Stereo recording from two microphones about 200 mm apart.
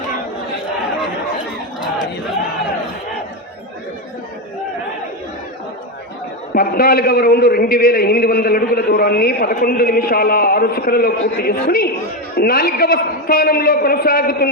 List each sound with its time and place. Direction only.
6.5 s a man's voice: 50° left (ahead or behind)